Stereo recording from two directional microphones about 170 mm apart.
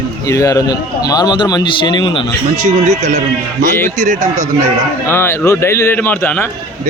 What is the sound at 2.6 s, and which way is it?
Speech, 45° right (ahead or behind).